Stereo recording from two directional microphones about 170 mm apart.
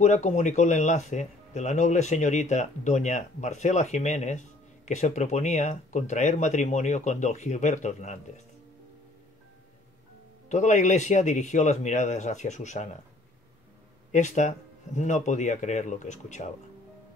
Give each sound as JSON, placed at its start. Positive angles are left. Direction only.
{"t": 0.0, "sound": "speech", "side_deg": 45}
{"t": 10.5, "sound": "speech", "side_deg": 45}
{"t": 14.1, "sound": "speech", "side_deg": 45}